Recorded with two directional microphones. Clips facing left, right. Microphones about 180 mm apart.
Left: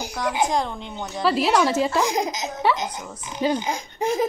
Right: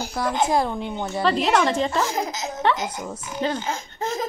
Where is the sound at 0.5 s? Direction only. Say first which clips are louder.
Right 3 dB; 5° right (ahead or behind).